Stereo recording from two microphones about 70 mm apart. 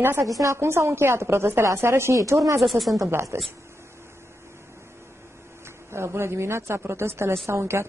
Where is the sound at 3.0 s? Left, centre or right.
Right.